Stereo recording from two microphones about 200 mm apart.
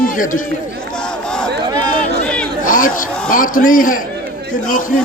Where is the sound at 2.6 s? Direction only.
40° left (ahead or behind).